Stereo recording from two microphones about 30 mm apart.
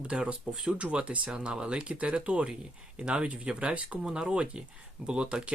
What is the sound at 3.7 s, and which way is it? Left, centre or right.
Speech, right.